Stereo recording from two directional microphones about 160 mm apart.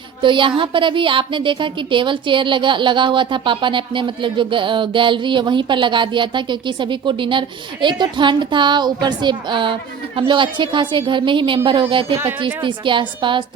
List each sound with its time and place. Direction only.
0.2 s a woman's voice: 30° right (ahead or behind)